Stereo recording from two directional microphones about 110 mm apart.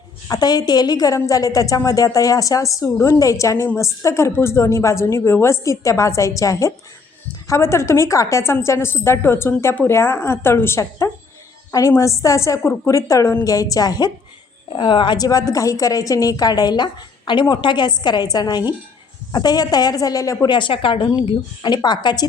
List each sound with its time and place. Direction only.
0.3 s a woman's voice: 35° left (ahead or behind)
14.7 s a woman's voice: 50° left (ahead or behind); by 20.5 s 30° left (ahead or behind)
20.5 s speech: 50° left (ahead or behind)